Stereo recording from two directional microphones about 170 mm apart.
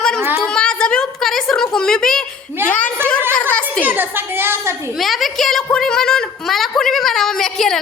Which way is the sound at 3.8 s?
10° right (ahead or behind).